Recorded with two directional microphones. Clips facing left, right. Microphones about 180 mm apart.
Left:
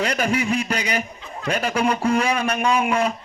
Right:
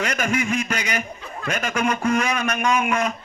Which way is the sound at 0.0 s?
35° left (ahead or behind).